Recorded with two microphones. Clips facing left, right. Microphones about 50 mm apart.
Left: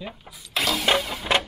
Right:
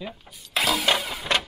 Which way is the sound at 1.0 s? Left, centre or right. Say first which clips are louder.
Left 2 dB; centre.